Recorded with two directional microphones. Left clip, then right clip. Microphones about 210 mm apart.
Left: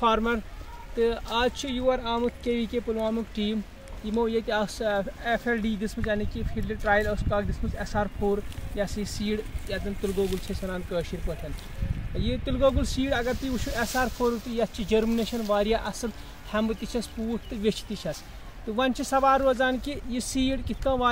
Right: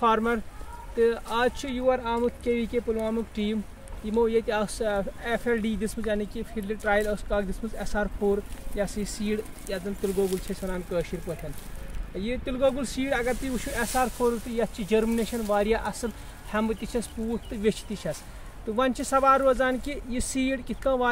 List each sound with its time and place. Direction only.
0.0 s speech: 5° right (ahead or behind); by 8.1 s 35° right (ahead or behind)
8.7 s speech: 25° right (ahead or behind)
12.2 s speech: 15° right (ahead or behind)